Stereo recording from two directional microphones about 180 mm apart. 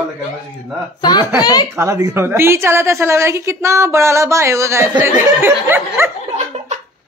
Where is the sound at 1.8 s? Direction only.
15° right (ahead or behind).